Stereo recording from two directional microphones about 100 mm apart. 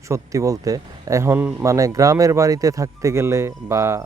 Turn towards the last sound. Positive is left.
turn(degrees=-30)  # may be behind; listen again after turning